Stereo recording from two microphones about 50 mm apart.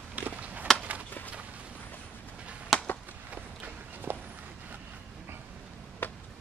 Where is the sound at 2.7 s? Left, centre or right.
Centre.